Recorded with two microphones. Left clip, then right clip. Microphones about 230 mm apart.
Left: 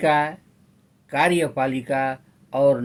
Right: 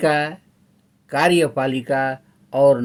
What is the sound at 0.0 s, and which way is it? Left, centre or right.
Speech, right.